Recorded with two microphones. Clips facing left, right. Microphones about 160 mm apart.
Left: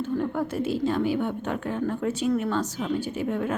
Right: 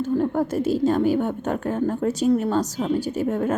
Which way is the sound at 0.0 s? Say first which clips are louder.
Right 5 dB; 40° right (ahead or behind).